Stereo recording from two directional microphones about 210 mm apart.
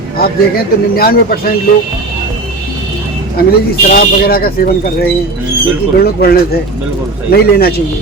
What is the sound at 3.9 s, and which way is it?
Speech, 45° left (ahead or behind).